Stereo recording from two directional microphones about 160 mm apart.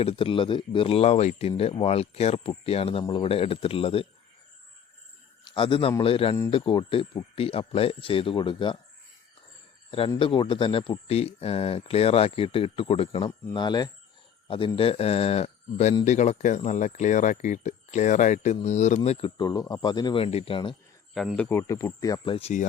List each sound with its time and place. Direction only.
0.0 s speech: 35° left (ahead or behind)
5.5 s speech: 30° left (ahead or behind)
10.2 s speech: 30° left (ahead or behind)
19.4 s speech: 25° left (ahead or behind)
21.1 s speech: centre (ahead or behind)
21.6 s speech: 20° left (ahead or behind)